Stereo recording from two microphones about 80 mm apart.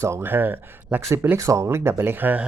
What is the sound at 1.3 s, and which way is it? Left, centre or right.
Speech, right.